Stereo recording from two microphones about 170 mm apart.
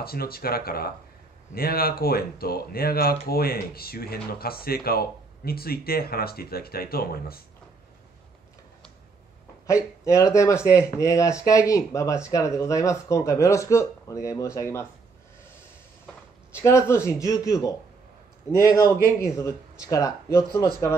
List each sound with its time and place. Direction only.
0.0 s speech: 65° left (ahead or behind)
9.7 s speech: 15° left (ahead or behind)
16.5 s speech: 15° left (ahead or behind)
18.8 s speech: 20° left (ahead or behind)